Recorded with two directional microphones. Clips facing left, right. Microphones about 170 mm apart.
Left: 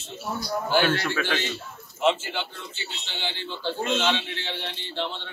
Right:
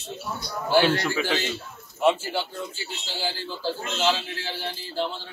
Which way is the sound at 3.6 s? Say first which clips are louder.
Even; 35° right (ahead or behind).